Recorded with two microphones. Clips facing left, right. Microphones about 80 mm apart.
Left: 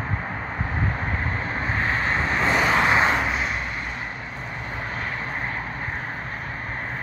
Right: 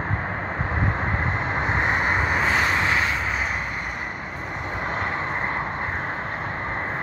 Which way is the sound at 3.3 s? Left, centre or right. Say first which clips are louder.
Even; centre.